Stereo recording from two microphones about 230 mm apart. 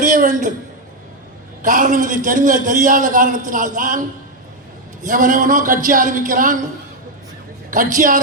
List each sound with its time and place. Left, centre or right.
0.0 s a sound: right
1.6 s a man's voice: right
5.0 s a man's voice: right
7.7 s a man's voice: right